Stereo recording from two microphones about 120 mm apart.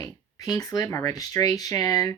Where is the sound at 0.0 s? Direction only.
30° left (ahead or behind).